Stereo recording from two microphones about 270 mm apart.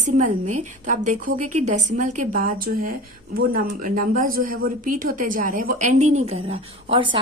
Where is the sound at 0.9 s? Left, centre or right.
Right.